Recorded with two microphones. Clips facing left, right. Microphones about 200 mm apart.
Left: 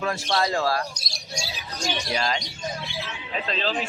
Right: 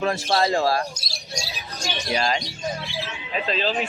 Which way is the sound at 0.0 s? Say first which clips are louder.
Right 3 dB; 30° right (ahead or behind).